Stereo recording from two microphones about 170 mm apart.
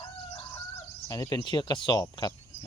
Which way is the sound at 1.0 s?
20° left (ahead or behind).